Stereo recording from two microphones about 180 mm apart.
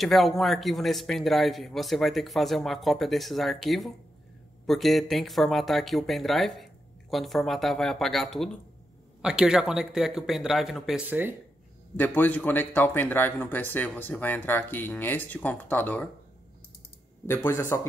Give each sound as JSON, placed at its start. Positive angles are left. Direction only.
{"t": 0.0, "sound": "speech", "side_deg": 0}
{"t": 12.0, "sound": "speech", "side_deg": 10}
{"t": 17.3, "sound": "speech", "side_deg": 10}